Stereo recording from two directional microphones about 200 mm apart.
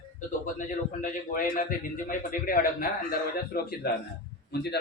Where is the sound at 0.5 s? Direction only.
40° left (ahead or behind).